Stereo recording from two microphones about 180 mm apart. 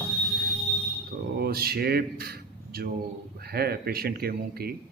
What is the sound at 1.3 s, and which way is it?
A man's voice, 60° right (ahead or behind).